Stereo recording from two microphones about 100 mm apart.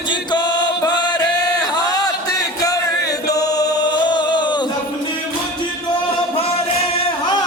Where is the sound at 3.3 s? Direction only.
40° left (ahead or behind).